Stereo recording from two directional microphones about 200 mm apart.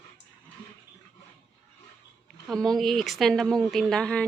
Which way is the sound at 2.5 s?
Centre (ahead or behind).